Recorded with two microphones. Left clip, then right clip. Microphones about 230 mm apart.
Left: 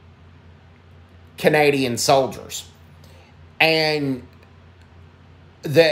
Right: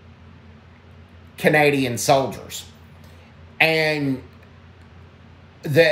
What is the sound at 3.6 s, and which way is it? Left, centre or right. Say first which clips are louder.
Speech: left 1 dB; centre.